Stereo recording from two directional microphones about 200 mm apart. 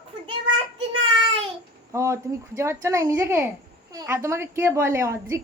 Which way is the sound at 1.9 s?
15° right (ahead or behind).